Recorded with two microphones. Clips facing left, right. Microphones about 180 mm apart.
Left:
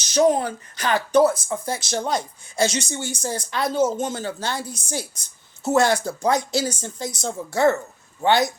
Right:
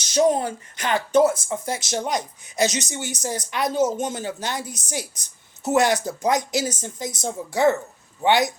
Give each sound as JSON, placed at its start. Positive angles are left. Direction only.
{"t": 0.0, "sound": "speech", "side_deg": -25}